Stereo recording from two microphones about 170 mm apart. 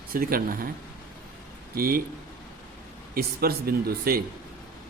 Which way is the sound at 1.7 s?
60° right (ahead or behind).